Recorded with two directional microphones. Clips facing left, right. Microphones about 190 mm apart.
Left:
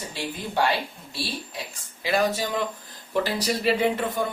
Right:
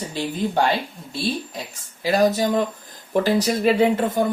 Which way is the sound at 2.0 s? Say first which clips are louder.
Right 6 dB; 40° right (ahead or behind).